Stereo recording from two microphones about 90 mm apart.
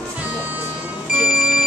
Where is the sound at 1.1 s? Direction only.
10° right (ahead or behind).